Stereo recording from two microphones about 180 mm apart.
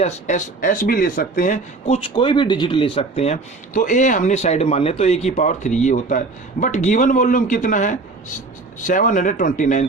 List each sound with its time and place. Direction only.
0.0 s speech: 45° left (ahead or behind)
2.0 s speech: 25° left (ahead or behind); by 9.8 s 45° left (ahead or behind)